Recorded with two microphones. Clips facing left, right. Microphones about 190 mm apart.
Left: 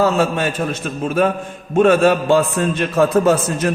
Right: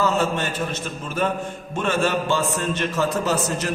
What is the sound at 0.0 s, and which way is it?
A man's voice, 55° left (ahead or behind).